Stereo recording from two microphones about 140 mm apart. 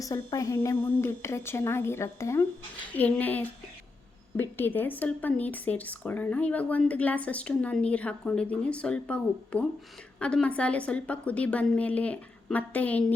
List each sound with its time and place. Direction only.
0.0 s speech: 25° left (ahead or behind)